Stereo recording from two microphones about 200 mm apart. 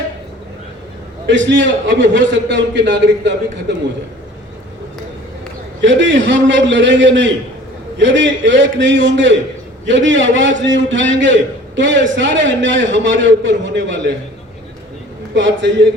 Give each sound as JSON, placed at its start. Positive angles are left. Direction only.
{"t": 1.3, "sound": "a man's voice", "side_deg": -65}
{"t": 5.8, "sound": "a man's voice", "side_deg": -65}
{"t": 15.4, "sound": "a man's voice", "side_deg": -65}